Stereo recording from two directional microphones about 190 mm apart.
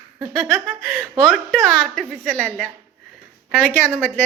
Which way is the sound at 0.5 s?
5° left (ahead or behind).